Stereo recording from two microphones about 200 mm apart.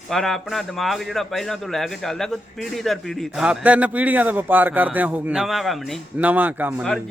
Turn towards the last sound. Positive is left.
turn(degrees=-10)  # may be behind; listen again after turning